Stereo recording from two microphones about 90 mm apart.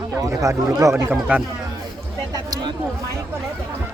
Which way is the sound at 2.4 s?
45° right (ahead or behind).